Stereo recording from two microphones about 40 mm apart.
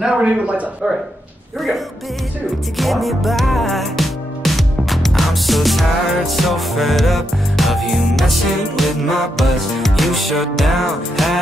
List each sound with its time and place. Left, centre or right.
0.0 s a man's voice: centre
2.8 s music: centre